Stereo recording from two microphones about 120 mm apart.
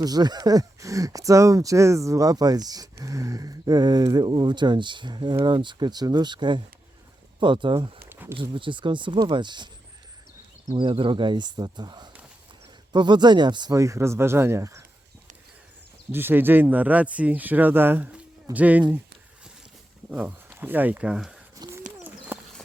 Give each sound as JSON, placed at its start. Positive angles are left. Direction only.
{"t": 0.0, "sound": "speech", "side_deg": -35}
{"t": 8.1, "sound": "a sound", "side_deg": -15}
{"t": 8.4, "sound": "speech", "side_deg": -45}
{"t": 10.8, "sound": "speech", "side_deg": -45}
{"t": 16.1, "sound": "speech", "side_deg": -15}
{"t": 20.1, "sound": "speech", "side_deg": -10}
{"t": 21.6, "sound": "bird", "side_deg": -35}
{"t": 22.0, "sound": "a sound", "side_deg": -15}